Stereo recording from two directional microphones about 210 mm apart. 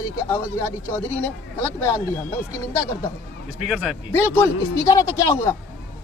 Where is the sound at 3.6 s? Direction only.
Centre (ahead or behind).